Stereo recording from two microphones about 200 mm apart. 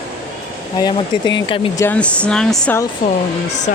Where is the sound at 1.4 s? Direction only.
25° left (ahead or behind).